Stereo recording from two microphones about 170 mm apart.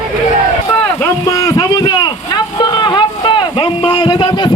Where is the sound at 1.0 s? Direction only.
20° left (ahead or behind).